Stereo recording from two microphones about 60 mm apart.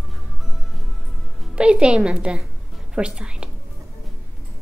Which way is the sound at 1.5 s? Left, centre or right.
Centre.